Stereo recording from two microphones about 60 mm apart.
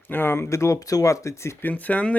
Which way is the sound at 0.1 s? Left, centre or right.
Left.